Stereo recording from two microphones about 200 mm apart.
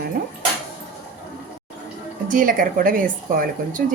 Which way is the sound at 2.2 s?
40° right (ahead or behind).